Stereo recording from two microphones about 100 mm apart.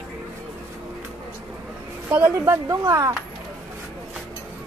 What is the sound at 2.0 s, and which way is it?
Speech, 20° right (ahead or behind).